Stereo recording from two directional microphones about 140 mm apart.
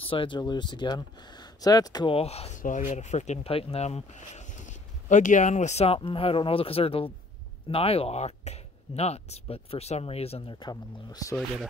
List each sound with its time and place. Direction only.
0.1 s speech: 35° left (ahead or behind)
2.1 s speech: 45° left (ahead or behind)
2.6 s speech: 60° left (ahead or behind)
5.9 s speech: 40° left (ahead or behind)